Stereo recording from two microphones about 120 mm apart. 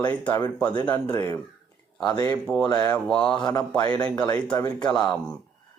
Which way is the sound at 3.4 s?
35° left (ahead or behind).